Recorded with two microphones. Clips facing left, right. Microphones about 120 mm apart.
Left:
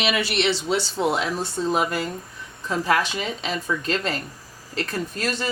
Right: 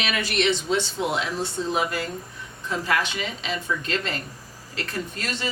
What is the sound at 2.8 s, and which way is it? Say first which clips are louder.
A woman's voice: left 3 dB; 40° left (ahead or behind).